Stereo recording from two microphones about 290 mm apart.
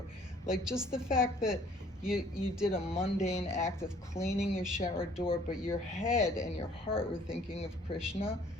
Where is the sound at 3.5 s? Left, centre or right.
Centre.